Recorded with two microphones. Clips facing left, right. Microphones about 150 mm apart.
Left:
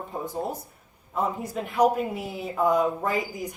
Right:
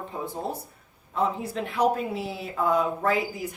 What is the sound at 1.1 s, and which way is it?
A woman's voice, 10° left (ahead or behind).